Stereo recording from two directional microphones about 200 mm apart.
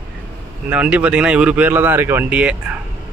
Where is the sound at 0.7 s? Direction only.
5° right (ahead or behind).